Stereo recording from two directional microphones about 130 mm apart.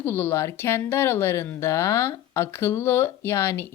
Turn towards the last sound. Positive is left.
turn(degrees=20)  # may be behind; listen again after turning